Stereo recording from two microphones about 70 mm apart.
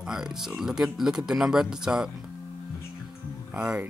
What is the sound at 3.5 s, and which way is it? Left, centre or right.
Speech, centre.